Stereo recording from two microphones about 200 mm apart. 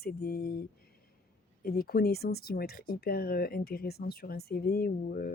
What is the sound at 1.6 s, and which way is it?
Speech, 50° left (ahead or behind).